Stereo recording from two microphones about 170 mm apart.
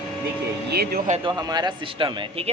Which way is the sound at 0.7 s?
65° right (ahead or behind).